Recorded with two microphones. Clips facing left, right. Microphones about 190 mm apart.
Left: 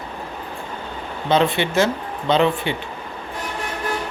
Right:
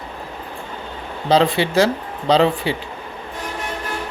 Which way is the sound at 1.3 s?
35° right (ahead or behind).